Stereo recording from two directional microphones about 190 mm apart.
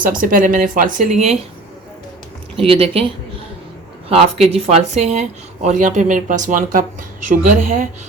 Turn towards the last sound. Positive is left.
turn(degrees=-45)  # may be behind; listen again after turning